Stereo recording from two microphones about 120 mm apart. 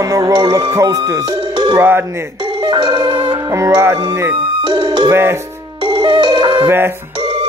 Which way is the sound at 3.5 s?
25° right (ahead or behind).